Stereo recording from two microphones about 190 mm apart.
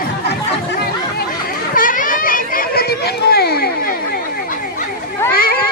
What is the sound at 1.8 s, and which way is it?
Children playing, 45° left (ahead or behind).